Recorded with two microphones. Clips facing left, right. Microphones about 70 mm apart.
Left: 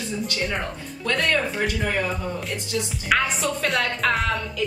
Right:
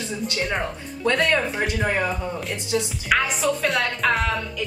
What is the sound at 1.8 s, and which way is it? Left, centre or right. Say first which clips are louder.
Speech: right 2 dB; right.